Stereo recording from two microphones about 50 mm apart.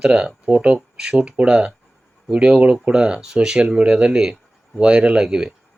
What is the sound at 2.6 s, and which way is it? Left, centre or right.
Speech, right.